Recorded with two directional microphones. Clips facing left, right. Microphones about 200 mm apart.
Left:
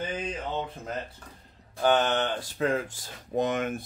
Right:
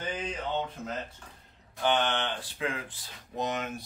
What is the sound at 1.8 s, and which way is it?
Speech, 40° left (ahead or behind).